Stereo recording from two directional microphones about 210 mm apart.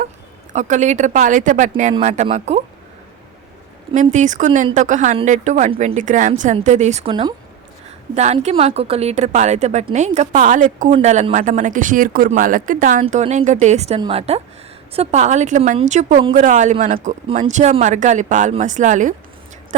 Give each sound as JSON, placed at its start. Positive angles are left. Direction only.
{"t": 0.5, "sound": "a woman's voice", "side_deg": -35}
{"t": 4.0, "sound": "a woman's voice", "side_deg": -35}
{"t": 7.1, "sound": "a woman's voice", "side_deg": -20}
{"t": 8.1, "sound": "a woman's voice", "side_deg": -30}